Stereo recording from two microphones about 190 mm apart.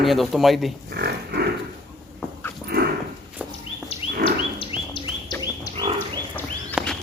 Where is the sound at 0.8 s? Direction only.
55° right (ahead or behind).